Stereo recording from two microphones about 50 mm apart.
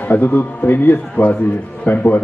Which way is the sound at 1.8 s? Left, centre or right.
Left.